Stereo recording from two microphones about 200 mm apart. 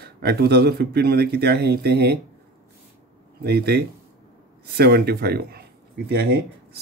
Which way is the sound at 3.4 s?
55° right (ahead or behind).